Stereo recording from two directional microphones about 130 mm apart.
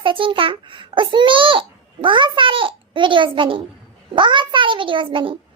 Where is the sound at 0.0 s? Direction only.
40° right (ahead or behind).